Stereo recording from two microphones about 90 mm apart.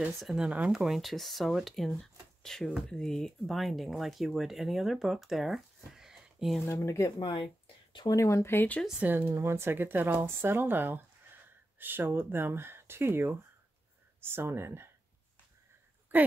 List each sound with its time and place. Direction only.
0.2 s speech: 5° right (ahead or behind)
6.6 s speech: 30° left (ahead or behind)
7.2 s a sound: 60° left (ahead or behind)
8.1 s speech: 35° left (ahead or behind)
9.0 s speech: 20° right (ahead or behind)